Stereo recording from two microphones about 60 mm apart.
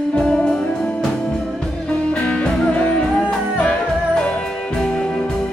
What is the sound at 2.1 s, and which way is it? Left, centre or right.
Music, left.